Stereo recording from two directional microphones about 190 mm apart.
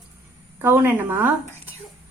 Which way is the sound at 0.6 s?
10° right (ahead or behind).